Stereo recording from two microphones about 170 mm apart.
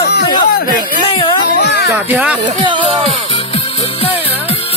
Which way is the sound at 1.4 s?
80° left.